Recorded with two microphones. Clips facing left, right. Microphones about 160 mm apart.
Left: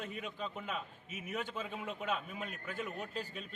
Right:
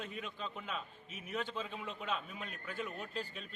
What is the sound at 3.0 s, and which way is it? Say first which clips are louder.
Speech: left 1 dB; 45° left (ahead or behind).